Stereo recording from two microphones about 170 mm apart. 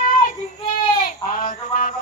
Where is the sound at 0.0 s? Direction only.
55° left (ahead or behind).